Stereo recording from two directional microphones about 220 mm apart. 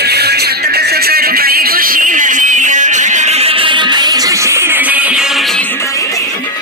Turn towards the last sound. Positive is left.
turn(degrees=0)  # may be behind; listen again after turning